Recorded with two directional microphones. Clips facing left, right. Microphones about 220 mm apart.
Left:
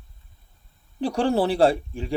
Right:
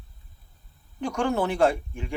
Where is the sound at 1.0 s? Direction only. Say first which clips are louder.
Left 4 dB; 35° left (ahead or behind).